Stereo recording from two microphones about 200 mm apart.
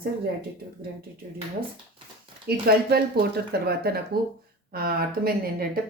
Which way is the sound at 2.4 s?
50° right (ahead or behind).